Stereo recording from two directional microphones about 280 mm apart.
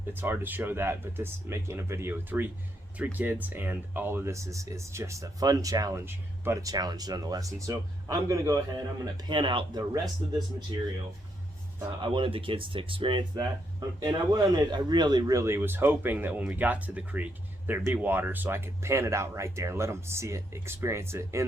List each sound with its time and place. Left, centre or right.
0.1 s speech: centre
11.9 s speech: centre